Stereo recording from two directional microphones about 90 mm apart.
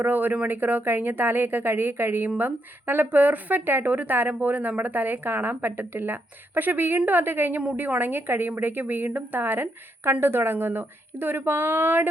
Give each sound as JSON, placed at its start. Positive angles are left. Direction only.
{"t": 0.0, "sound": "speech", "side_deg": -20}